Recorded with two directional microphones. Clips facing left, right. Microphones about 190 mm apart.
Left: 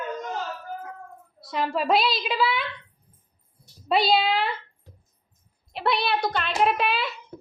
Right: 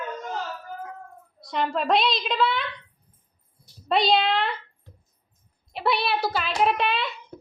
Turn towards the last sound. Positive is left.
turn(degrees=5)  # may be behind; listen again after turning